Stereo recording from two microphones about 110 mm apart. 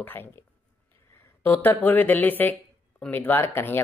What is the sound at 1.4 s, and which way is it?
Speech, 20° left (ahead or behind).